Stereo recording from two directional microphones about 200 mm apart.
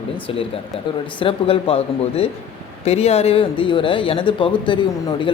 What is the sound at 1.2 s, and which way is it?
Speech, 25° left (ahead or behind).